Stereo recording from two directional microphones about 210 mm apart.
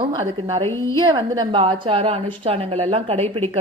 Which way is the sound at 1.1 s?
20° right (ahead or behind).